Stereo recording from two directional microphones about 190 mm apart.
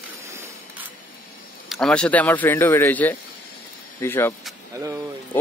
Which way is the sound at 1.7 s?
5° left (ahead or behind).